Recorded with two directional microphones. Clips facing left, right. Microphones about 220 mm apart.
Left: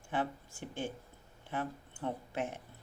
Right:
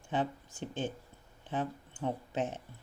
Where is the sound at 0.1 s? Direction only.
20° right (ahead or behind).